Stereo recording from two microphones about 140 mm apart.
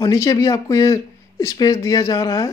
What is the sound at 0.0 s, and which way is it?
Speech, 25° left (ahead or behind).